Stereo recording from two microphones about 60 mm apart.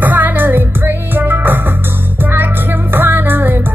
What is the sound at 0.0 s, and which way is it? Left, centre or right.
Music, right.